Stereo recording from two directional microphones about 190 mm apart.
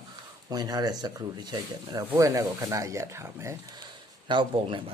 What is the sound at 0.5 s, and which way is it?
Speech, 20° right (ahead or behind).